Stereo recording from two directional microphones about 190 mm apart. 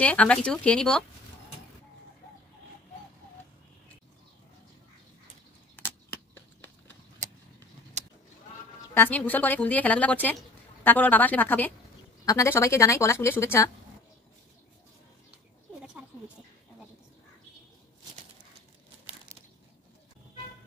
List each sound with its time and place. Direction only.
0.0 s speech: 5° left (ahead or behind)
5.8 s a sound: 10° left (ahead or behind)
8.0 s honk: 35° right (ahead or behind)
8.9 s a woman's voice: 10° left (ahead or behind)